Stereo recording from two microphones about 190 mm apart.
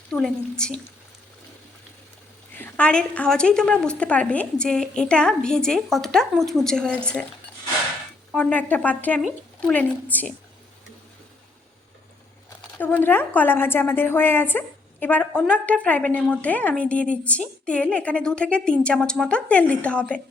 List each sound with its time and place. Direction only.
0.1 s a woman's voice: 5° left (ahead or behind)
2.6 s a woman's voice: 5° left (ahead or behind)
8.3 s a woman's voice: 5° left (ahead or behind)
12.8 s a woman's voice: 10° left (ahead or behind)